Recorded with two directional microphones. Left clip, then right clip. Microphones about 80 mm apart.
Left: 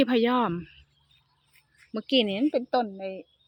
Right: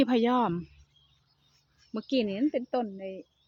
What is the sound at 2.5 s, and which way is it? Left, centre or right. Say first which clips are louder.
Speech: left 5 dB; left.